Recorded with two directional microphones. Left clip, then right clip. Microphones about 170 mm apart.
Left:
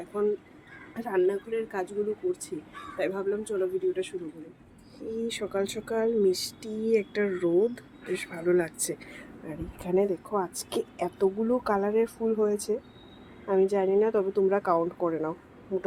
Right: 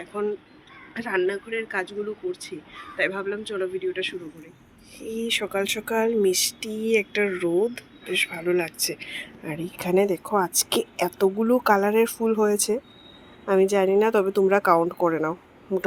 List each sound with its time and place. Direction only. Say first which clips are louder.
0.9 s speech: right 2 dB; 10° left (ahead or behind)
4.9 s speech: right 2 dB; 60° right (ahead or behind)
5.2 s speech: right 6 dB; centre (ahead or behind)
7.4 s speech: left 1 dB; 10° right (ahead or behind)
8.1 s speech: right 3 dB; 5° left (ahead or behind)
9.5 s speech: right 5 dB; 10° right (ahead or behind)